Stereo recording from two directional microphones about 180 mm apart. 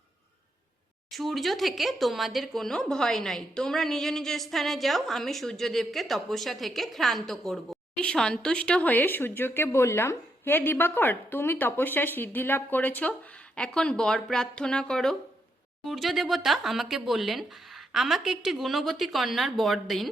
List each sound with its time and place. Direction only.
1.1 s speech: centre (ahead or behind)